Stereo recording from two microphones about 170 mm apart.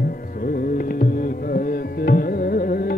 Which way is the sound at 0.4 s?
55° left (ahead or behind).